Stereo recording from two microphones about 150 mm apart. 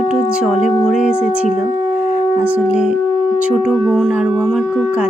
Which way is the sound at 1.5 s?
5° right (ahead or behind).